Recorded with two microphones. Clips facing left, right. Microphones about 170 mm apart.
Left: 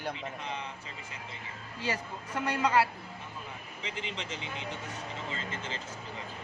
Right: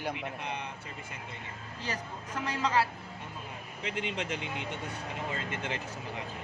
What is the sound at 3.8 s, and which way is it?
Speech, 60° right (ahead or behind).